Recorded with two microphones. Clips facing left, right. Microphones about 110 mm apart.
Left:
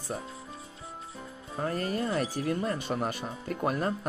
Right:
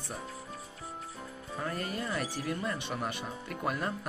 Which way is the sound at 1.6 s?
40° left (ahead or behind).